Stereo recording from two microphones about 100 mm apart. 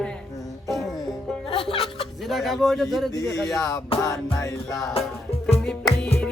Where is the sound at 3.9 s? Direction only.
70° left (ahead or behind).